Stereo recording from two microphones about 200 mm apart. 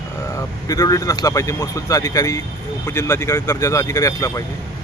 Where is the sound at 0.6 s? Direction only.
15° left (ahead or behind).